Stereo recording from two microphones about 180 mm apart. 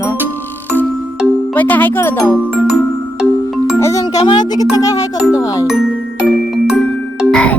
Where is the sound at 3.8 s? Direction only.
15° left (ahead or behind).